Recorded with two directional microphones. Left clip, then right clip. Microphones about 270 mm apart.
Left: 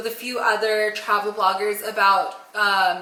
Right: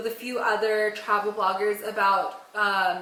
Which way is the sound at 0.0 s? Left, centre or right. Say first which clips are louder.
Left 4 dB; centre.